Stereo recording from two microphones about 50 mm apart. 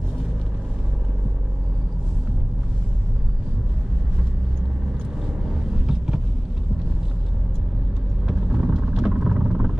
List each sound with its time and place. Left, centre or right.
5.9 s vehicle: centre
8.3 s vehicle: centre